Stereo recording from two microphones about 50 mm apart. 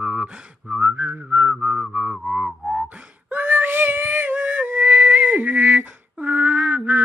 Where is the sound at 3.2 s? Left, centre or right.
Right.